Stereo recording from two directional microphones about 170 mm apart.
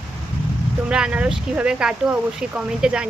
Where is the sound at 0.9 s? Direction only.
5° right (ahead or behind).